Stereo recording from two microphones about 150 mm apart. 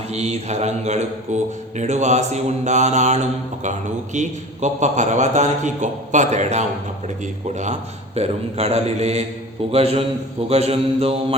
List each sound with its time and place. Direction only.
0.1 s a man's voice: 45° right (ahead or behind)
9.7 s mantra: 40° right (ahead or behind)